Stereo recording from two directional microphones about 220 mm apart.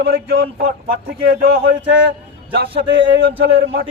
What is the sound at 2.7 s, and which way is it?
Speech, 25° right (ahead or behind).